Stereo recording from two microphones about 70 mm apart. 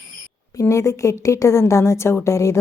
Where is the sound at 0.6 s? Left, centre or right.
Left.